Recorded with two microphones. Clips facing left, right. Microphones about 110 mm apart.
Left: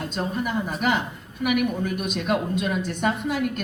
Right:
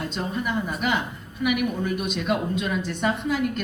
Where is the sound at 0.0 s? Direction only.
45° left (ahead or behind).